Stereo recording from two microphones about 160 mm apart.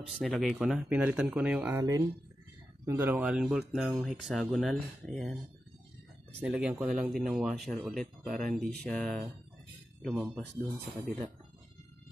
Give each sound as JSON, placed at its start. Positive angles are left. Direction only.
{"t": 0.0, "sound": "speech", "side_deg": 0}
{"t": 1.7, "sound": "speech", "side_deg": -25}
{"t": 3.2, "sound": "speech", "side_deg": -5}
{"t": 6.4, "sound": "speech", "side_deg": -5}